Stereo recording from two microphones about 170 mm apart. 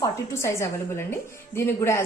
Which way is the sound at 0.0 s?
15° left (ahead or behind).